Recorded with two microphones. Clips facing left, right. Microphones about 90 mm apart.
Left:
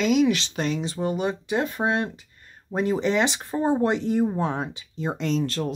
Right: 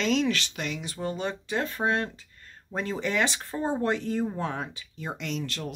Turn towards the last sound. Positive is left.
turn(degrees=35)  # may be behind; listen again after turning